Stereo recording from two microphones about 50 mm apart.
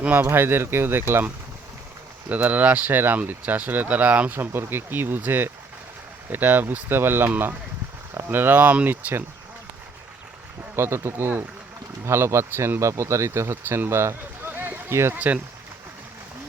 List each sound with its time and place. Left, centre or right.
0.0 s speech: right
0.3 s speech: right
2.3 s speech: right
2.9 s speech: right
4.4 s speech: right
10.8 s speech: right
12.8 s speech: right
13.7 s speech: right
13.9 s speech: right
14.5 s a sound: right
14.8 s speech: right
15.1 s speech: right